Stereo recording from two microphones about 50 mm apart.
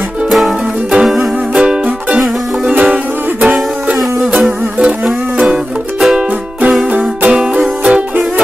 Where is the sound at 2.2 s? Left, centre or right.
Centre.